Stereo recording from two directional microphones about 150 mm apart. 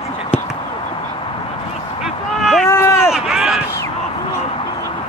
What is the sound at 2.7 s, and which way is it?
Run, 15° left (ahead or behind).